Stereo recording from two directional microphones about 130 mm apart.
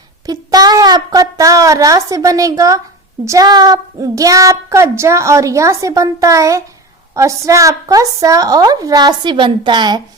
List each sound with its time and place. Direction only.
0.3 s a woman's voice: 30° right (ahead or behind)